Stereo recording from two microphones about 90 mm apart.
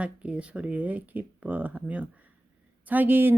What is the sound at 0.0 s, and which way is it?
Speech, 15° right (ahead or behind).